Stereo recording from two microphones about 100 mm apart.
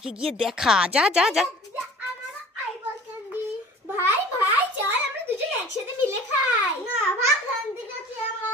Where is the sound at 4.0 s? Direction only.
20° right (ahead or behind).